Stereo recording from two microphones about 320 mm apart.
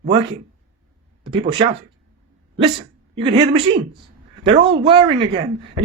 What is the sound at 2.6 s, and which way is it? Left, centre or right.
Speech, centre.